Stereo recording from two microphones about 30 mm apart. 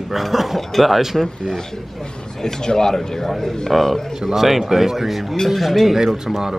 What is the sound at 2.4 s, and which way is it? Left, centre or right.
Speech, centre.